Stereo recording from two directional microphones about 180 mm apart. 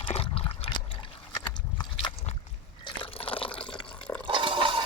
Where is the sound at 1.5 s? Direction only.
25° left (ahead or behind).